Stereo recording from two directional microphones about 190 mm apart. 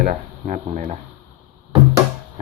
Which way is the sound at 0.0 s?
40° right (ahead or behind).